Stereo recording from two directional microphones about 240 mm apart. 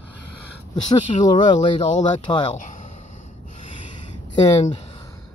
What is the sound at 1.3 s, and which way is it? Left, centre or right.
Speech, left.